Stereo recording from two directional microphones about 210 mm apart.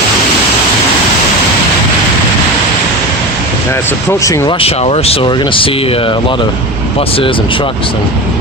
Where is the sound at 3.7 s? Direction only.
10° left (ahead or behind).